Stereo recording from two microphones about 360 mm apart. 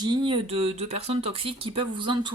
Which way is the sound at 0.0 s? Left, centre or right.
Centre.